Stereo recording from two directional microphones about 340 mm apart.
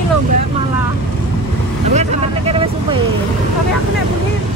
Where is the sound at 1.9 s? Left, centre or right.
Centre.